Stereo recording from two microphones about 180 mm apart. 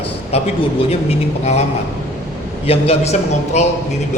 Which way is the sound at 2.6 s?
35° left (ahead or behind).